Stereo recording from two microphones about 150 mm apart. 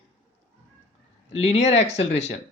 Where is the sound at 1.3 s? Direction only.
45° left (ahead or behind).